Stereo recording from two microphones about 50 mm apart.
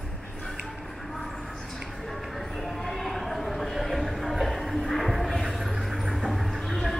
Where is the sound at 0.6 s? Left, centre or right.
Centre.